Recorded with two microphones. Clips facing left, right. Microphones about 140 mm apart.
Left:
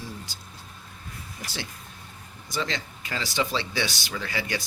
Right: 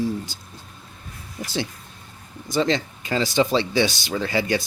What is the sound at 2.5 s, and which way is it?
A man's voice, 30° right (ahead or behind).